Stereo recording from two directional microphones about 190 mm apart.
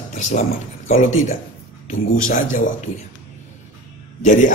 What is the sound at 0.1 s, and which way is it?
A man's voice, 40° left (ahead or behind).